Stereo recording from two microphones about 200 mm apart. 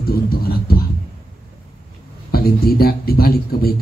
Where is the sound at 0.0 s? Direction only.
50° left (ahead or behind).